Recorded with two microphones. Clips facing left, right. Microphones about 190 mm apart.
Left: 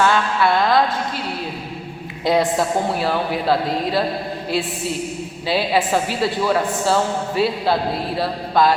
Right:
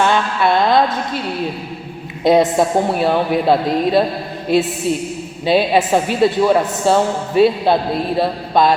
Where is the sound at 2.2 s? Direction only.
20° right (ahead or behind).